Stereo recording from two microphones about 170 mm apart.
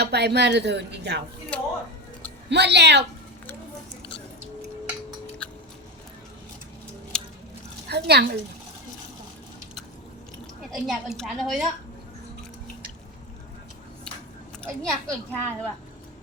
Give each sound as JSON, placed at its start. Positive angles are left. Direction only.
{"t": 0.0, "sound": "speech", "side_deg": -75}
{"t": 1.5, "sound": "a sound", "side_deg": 10}
{"t": 2.5, "sound": "speech", "side_deg": -85}
{"t": 5.4, "sound": "music", "side_deg": 5}
{"t": 7.1, "sound": "squish", "side_deg": 5}
{"t": 7.9, "sound": "speech", "side_deg": -75}
{"t": 10.7, "sound": "a woman's voice", "side_deg": 0}
{"t": 14.6, "sound": "a woman's voice", "side_deg": 5}